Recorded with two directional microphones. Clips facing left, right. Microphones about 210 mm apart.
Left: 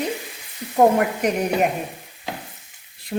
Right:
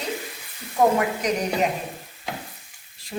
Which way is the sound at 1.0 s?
55° left (ahead or behind).